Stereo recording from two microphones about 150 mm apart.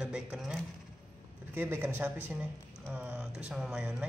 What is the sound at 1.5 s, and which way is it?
Speech, 15° right (ahead or behind).